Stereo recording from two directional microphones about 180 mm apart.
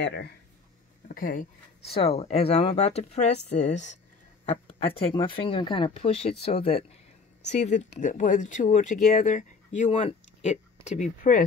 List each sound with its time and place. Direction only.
0.0 s speech: 65° left (ahead or behind)
1.0 s speech: 50° left (ahead or behind)
1.9 s speech: 35° left (ahead or behind)